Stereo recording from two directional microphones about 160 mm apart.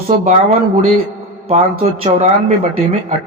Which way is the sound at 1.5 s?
40° right (ahead or behind).